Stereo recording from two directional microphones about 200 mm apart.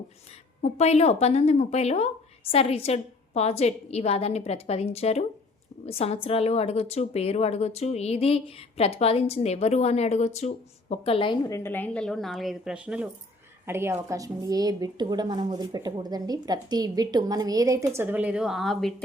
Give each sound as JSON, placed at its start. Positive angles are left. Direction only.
{"t": 0.6, "sound": "a woman's voice", "side_deg": 30}